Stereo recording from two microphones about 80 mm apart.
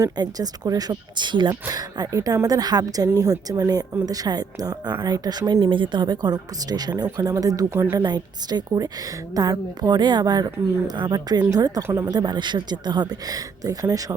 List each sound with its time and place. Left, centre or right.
0.0 s a woman's voice: right
1.7 s a woman's voice: right
8.0 s a woman's voice: right
11.8 s speech: right
12.1 s a woman's voice: right